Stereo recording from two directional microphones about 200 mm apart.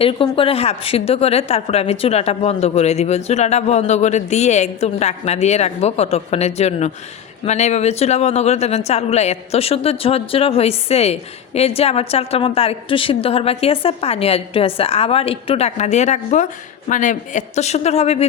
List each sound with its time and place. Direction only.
0.0 s speech: 25° left (ahead or behind)